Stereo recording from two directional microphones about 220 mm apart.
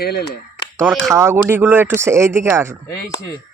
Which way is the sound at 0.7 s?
5° right (ahead or behind).